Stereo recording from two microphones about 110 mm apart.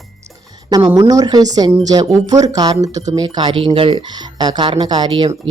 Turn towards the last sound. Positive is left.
turn(degrees=-50)  # may be behind; listen again after turning